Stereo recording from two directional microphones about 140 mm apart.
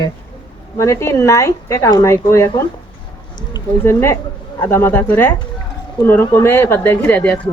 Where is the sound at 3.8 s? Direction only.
15° left (ahead or behind).